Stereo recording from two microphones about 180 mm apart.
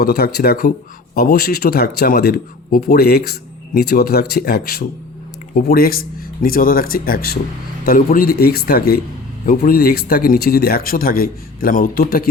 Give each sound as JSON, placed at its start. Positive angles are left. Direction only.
{"t": 0.0, "sound": "speech", "side_deg": 60}